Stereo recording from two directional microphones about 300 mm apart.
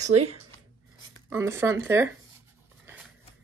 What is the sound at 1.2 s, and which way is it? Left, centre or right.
Speech, centre.